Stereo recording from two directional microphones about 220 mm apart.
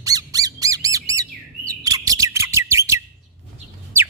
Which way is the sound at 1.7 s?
15° right (ahead or behind).